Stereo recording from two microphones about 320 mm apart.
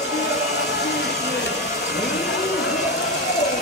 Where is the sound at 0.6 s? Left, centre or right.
Left.